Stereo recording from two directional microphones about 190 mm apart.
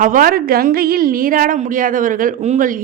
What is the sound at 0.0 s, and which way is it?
A woman's voice, 45° right (ahead or behind).